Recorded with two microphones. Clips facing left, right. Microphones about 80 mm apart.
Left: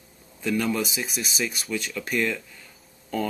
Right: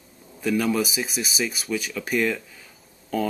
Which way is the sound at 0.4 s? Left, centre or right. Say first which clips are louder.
Right 3 dB; centre.